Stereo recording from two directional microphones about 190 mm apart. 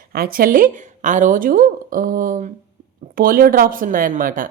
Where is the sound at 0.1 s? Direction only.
50° right (ahead or behind).